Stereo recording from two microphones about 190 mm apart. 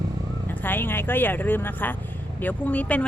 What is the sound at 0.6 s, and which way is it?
Vehicle, 10° left (ahead or behind).